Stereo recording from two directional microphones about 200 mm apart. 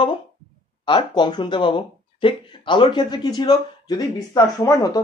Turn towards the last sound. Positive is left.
turn(degrees=15)  # may be behind; listen again after turning